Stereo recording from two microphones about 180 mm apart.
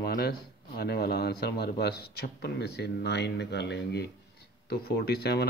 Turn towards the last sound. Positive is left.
turn(degrees=65)  # may be behind; listen again after turning